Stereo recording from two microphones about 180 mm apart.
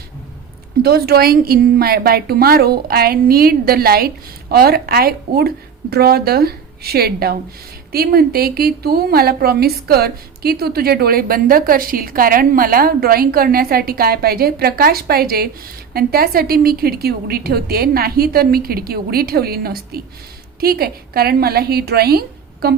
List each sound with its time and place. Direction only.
0.8 s a woman's voice: 60° right (ahead or behind)